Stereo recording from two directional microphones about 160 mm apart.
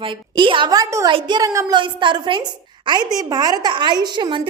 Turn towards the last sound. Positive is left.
turn(degrees=-30)  # may be behind; listen again after turning